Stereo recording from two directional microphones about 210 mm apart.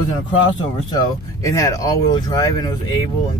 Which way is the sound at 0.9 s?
15° left (ahead or behind).